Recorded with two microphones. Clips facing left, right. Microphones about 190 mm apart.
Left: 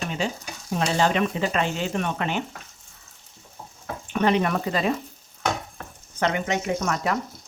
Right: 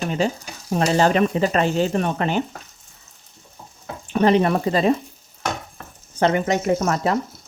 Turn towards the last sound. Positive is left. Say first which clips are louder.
# right 5 dB
turn(degrees=-35)  # may be behind; listen again after turning